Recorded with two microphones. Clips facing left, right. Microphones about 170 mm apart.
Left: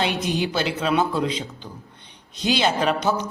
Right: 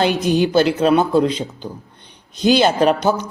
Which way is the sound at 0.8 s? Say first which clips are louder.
Right 4 dB; 40° right (ahead or behind).